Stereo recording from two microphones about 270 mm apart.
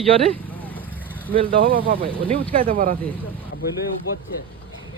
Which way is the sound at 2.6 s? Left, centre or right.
Right.